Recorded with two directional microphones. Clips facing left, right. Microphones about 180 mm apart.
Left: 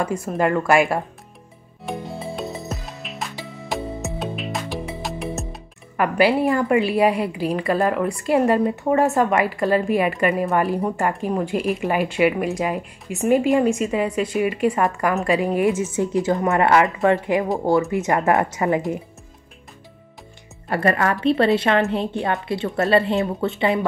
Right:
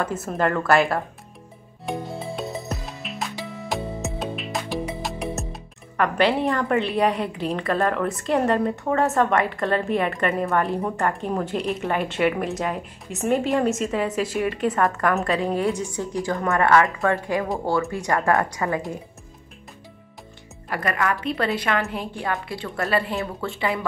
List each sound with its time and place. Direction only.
0.3 s a woman's voice: 10° left (ahead or behind)
1.9 s music: centre (ahead or behind)
9.0 s a woman's voice: 5° left (ahead or behind)
14.4 s a woman's voice: 5° left (ahead or behind)
20.6 s speech: 30° left (ahead or behind)